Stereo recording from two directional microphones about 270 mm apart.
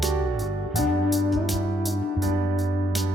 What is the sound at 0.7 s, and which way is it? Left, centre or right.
Music, centre.